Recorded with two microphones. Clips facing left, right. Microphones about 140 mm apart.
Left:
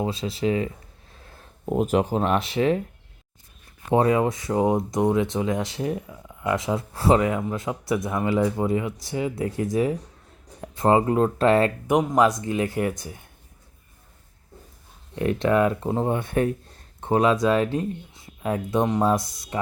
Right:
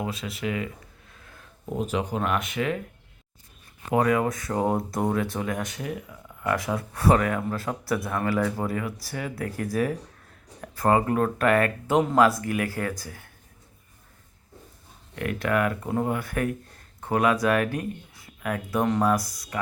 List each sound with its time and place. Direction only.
0.0 s speech: 30° left (ahead or behind)
1.1 s a sound: 35° left (ahead or behind)
1.7 s speech: 50° left (ahead or behind); by 2.8 s 30° left (ahead or behind)
3.8 s speech: 25° left (ahead or behind)
11.9 s speech: 15° left (ahead or behind)
15.1 s speech: 25° left (ahead or behind)